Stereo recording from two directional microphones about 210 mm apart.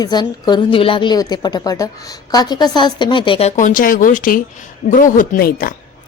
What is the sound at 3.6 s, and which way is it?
A woman's voice, 40° left (ahead or behind).